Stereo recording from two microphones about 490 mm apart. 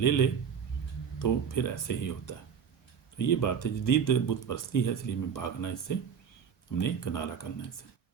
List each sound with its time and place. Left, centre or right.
0.0 s speech: left